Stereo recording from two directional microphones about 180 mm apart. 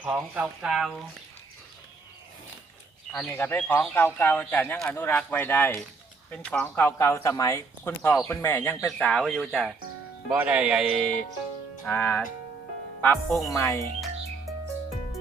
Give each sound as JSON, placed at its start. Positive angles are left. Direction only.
{"t": 0.0, "sound": "speech", "side_deg": -10}
{"t": 3.1, "sound": "speech", "side_deg": 5}
{"t": 11.9, "sound": "speech", "side_deg": 10}
{"t": 13.5, "sound": "speech", "side_deg": 15}